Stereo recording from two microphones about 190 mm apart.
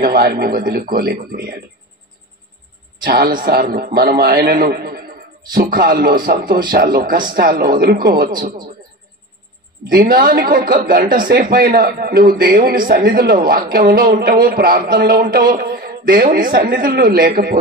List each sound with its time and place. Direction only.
0.0 s a man's voice: 50° right (ahead or behind)
3.0 s a man's voice: 55° right (ahead or behind)
10.1 s a man's voice: 50° right (ahead or behind)